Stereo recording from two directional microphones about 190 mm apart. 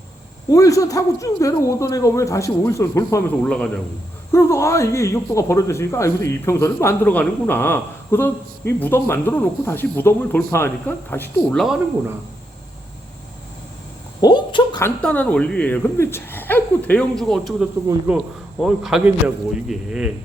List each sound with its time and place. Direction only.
0.5 s speech: 20° left (ahead or behind)
11.6 s speech: 5° right (ahead or behind)
14.2 s a sound: 20° left (ahead or behind)
14.8 s speech: 10° left (ahead or behind)